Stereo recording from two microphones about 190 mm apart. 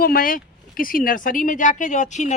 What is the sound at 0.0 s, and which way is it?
Speech, 50° left (ahead or behind).